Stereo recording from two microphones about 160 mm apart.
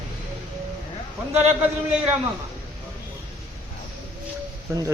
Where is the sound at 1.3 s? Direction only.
40° right (ahead or behind).